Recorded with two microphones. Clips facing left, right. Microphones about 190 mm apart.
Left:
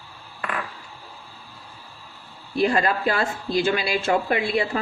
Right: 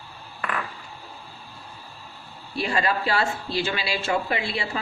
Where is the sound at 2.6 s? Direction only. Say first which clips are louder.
Left 4 dB; 50° left (ahead or behind).